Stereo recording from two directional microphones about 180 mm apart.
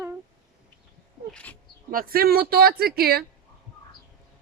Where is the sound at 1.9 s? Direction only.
55° right (ahead or behind).